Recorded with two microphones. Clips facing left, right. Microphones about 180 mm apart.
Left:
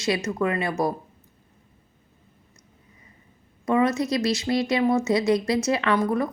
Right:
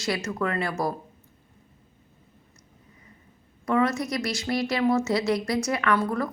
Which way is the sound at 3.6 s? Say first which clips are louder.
Left 2 dB; 20° left (ahead or behind).